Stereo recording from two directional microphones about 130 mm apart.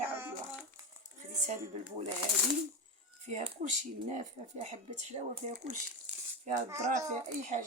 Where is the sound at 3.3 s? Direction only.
55° right (ahead or behind).